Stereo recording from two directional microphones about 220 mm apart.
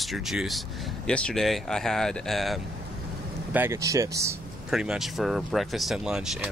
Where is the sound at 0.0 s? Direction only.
Centre (ahead or behind).